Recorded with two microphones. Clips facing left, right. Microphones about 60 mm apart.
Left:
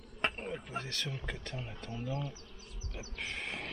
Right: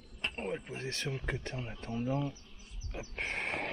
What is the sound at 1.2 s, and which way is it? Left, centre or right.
Speech, right.